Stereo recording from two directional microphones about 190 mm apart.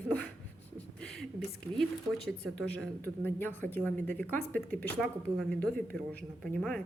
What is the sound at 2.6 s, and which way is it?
A woman's voice, 5° left (ahead or behind).